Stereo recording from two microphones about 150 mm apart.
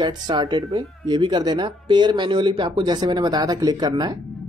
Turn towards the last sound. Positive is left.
turn(degrees=-25)  # may be behind; listen again after turning